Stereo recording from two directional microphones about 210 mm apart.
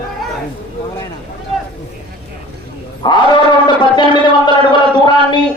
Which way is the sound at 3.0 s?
20° left (ahead or behind).